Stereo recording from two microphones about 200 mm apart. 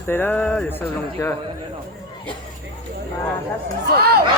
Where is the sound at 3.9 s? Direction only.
50° right (ahead or behind).